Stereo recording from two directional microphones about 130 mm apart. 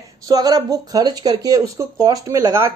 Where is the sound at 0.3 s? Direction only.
30° right (ahead or behind).